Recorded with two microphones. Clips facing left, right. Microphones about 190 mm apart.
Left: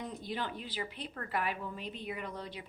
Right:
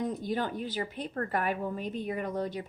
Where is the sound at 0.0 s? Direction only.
45° right (ahead or behind).